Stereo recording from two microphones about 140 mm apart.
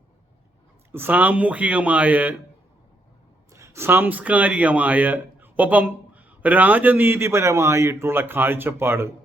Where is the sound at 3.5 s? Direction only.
20° right (ahead or behind).